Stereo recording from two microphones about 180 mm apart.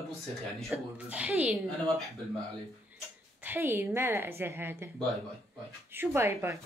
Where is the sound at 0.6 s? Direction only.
5° right (ahead or behind).